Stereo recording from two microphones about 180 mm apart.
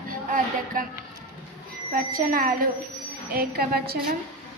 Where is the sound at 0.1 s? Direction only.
50° right (ahead or behind).